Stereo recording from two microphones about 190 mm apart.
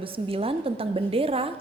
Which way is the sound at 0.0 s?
30° right (ahead or behind).